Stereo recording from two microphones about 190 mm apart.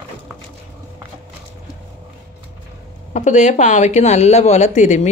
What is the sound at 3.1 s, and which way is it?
Speech, 40° left (ahead or behind).